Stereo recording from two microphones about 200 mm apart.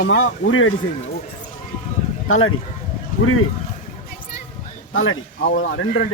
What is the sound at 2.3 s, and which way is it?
Speech, 90° left.